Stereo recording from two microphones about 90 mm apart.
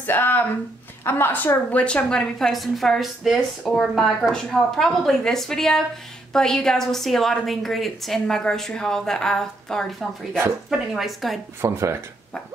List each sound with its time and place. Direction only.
0.0 s a woman's voice: 20° left (ahead or behind); by 11.3 s centre (ahead or behind)
11.6 s speech: 30° right (ahead or behind)